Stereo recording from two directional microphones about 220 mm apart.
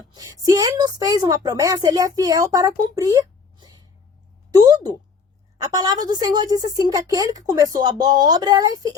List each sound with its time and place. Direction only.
0.1 s a woman's voice: 15° right (ahead or behind)